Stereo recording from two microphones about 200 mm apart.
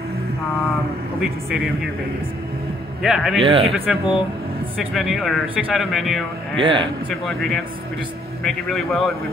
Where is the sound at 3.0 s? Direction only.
Centre (ahead or behind).